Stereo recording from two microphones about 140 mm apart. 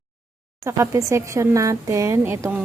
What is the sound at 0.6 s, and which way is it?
Speech, 20° right (ahead or behind).